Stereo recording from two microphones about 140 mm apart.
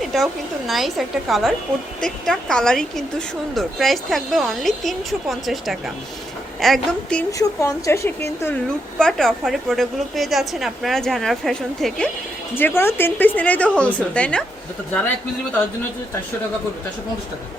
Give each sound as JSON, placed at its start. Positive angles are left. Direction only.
{"t": 0.0, "sound": "a sound", "side_deg": 0}
{"t": 0.7, "sound": "a woman's voice", "side_deg": 0}
{"t": 7.3, "sound": "a woman's voice", "side_deg": 25}
{"t": 9.0, "sound": "a woman's voice", "side_deg": 5}
{"t": 12.5, "sound": "a woman's voice", "side_deg": 15}